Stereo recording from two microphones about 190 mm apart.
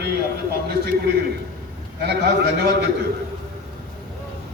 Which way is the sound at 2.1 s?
60° right (ahead or behind).